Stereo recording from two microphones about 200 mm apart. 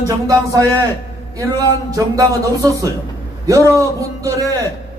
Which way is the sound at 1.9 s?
15° right (ahead or behind).